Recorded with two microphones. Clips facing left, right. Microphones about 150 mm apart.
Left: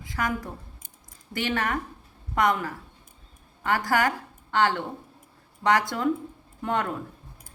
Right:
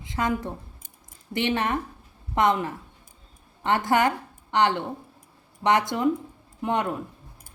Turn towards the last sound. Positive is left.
turn(degrees=-20)  # may be behind; listen again after turning